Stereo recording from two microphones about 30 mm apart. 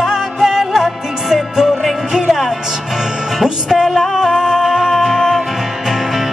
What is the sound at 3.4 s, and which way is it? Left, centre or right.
Music, centre.